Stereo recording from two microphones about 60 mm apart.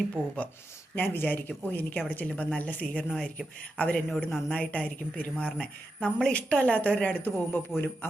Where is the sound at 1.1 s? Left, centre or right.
Left.